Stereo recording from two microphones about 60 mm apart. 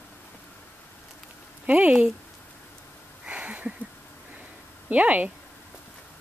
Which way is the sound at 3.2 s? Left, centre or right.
Right.